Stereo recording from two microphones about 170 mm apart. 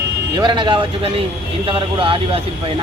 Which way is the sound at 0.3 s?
25° right (ahead or behind).